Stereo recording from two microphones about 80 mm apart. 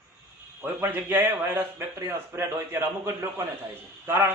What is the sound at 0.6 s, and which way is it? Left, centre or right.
A man's voice, right.